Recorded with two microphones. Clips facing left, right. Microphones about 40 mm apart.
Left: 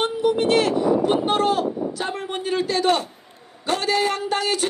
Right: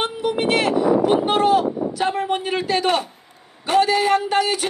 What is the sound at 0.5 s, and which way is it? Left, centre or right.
Speech, centre.